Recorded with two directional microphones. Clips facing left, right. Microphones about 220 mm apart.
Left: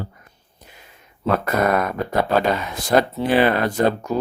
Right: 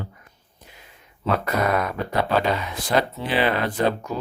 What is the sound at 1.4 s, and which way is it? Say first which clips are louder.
Speech: left 4 dB; 50° left (ahead or behind).